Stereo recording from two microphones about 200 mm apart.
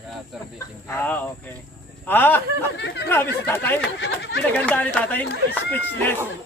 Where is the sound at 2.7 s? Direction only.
60° left (ahead or behind).